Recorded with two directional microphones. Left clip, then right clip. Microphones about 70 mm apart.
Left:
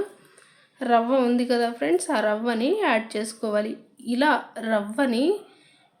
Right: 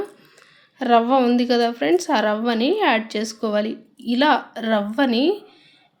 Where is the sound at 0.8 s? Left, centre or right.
Right.